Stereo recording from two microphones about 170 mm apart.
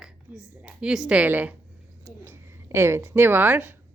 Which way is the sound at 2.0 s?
15° right (ahead or behind).